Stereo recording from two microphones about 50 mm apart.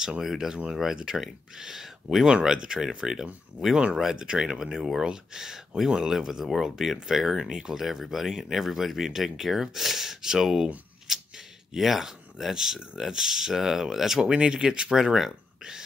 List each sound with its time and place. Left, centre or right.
0.2 s speech: centre